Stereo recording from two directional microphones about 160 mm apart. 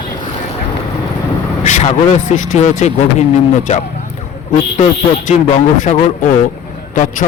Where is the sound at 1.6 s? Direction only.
50° left (ahead or behind).